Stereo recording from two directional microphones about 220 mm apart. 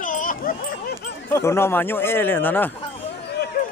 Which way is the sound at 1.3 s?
10° left (ahead or behind).